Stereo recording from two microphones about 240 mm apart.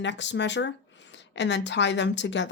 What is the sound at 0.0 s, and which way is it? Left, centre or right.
A woman's voice, left.